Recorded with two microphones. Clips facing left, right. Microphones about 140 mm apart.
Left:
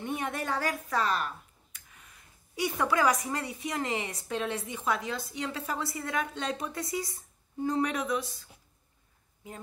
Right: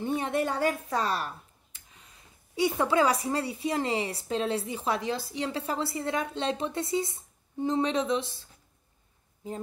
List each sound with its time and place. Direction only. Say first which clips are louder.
0.0 s a woman's voice: right 5 dB; 30° right (ahead or behind)